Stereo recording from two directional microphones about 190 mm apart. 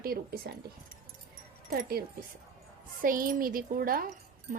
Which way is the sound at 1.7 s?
50° right (ahead or behind).